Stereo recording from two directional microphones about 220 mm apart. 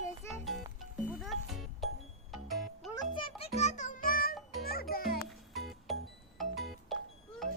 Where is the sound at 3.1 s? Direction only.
30° left (ahead or behind).